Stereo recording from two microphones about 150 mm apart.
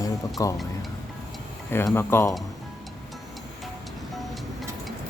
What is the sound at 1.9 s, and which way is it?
Speech, 15° left (ahead or behind).